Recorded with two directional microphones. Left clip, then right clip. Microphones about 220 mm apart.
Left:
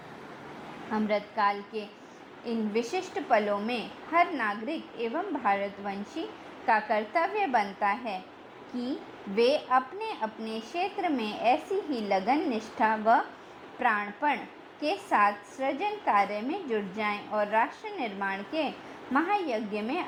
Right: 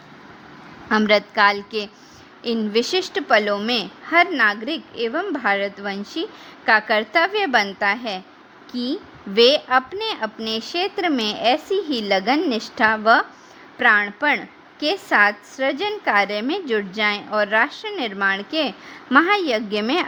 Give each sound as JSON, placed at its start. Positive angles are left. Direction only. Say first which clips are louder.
{"t": 0.9, "sound": "a woman's voice", "louder": "right 13 dB", "side_deg": -35}
{"t": 9.3, "sound": "a woman's voice", "louder": "right 9 dB", "side_deg": -25}